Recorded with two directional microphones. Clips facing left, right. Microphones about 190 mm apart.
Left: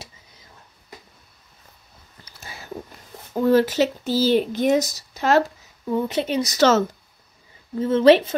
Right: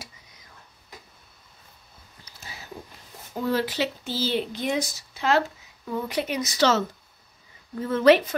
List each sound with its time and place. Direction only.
2.5 s a sound: 60° left (ahead or behind)
3.3 s speech: 50° left (ahead or behind)
5.9 s a woman's voice: 25° left (ahead or behind)
6.5 s speech: 45° left (ahead or behind)
7.7 s a woman's voice: 25° left (ahead or behind)